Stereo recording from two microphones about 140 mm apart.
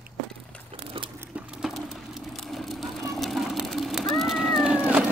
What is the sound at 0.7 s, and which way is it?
Crumpling, 40° right (ahead or behind).